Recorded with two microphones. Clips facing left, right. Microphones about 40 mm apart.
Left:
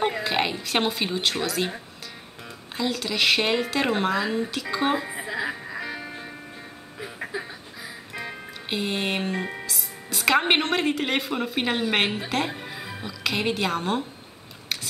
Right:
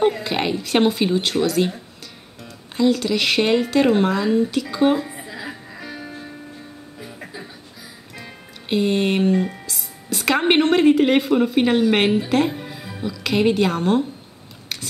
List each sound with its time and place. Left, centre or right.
0.0 s a woman's voice: centre
2.8 s speech: centre
5.2 s music: centre
8.6 s speech: centre
9.4 s speech: left
9.7 s a woman's voice: centre